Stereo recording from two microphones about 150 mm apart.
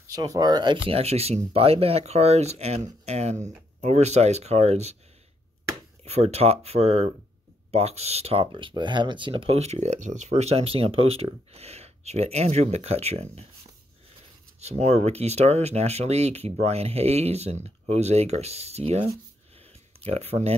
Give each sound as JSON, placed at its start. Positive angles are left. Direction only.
{"t": 0.0, "sound": "speech", "side_deg": -25}
{"t": 6.0, "sound": "speech", "side_deg": -45}
{"t": 14.6, "sound": "speech", "side_deg": -45}
{"t": 19.5, "sound": "a sound", "side_deg": -45}